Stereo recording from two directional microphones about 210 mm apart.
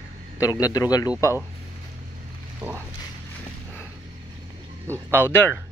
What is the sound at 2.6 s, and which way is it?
Speech, 10° right (ahead or behind).